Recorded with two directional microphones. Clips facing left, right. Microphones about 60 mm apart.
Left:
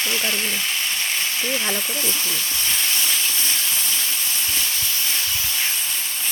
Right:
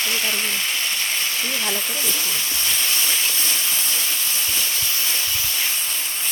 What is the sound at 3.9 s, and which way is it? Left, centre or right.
Steam, centre.